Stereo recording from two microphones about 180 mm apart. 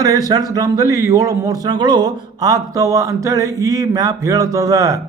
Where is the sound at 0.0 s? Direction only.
20° right (ahead or behind).